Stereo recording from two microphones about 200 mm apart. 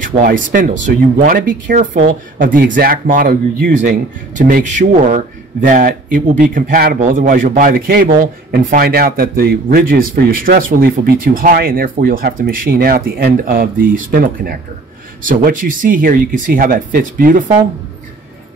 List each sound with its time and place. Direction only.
0.0 s speech: 45° right (ahead or behind)